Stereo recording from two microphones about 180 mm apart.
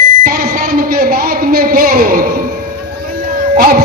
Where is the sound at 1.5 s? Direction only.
55° right (ahead or behind).